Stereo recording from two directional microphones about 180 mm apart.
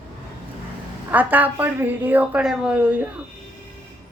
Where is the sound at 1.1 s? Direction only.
10° right (ahead or behind).